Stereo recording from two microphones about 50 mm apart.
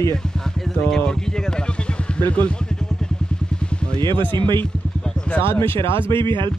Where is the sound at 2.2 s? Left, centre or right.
Left.